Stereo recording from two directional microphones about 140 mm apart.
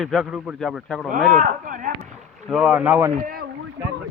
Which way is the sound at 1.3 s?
75° right (ahead or behind).